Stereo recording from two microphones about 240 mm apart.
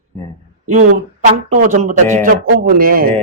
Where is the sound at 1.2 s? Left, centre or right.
Right.